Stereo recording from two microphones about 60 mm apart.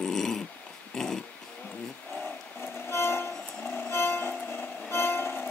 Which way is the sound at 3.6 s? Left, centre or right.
Left.